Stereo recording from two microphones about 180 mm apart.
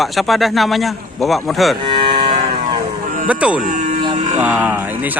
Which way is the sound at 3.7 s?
45° right (ahead or behind).